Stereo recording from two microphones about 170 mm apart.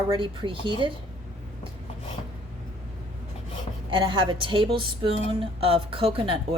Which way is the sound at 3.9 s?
30° right (ahead or behind).